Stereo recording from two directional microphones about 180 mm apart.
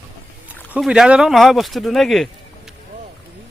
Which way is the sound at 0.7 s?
5° right (ahead or behind).